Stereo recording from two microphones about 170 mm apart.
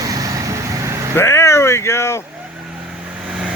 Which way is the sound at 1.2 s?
15° left (ahead or behind).